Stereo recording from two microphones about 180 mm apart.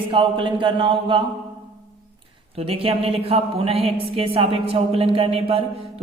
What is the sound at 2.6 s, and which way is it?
A man's voice, 30° right (ahead or behind).